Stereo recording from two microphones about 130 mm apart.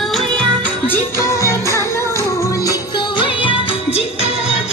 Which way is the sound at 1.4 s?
20° left (ahead or behind).